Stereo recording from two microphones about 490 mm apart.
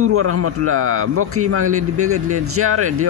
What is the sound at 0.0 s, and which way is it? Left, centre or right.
A man's voice, right.